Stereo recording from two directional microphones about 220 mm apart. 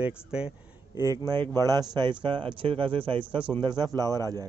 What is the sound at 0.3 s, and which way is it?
Speech, 5° right (ahead or behind).